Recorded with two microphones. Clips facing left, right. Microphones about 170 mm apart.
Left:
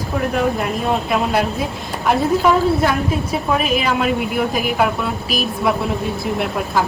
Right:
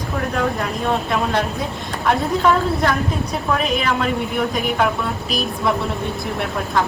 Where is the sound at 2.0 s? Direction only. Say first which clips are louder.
Left 2 dB; 5° left (ahead or behind).